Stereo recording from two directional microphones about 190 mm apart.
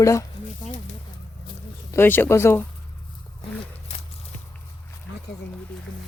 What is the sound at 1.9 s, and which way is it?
Speech, 10° left (ahead or behind).